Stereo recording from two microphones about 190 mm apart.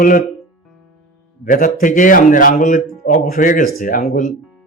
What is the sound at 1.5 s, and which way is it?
Speech, 45° left (ahead or behind).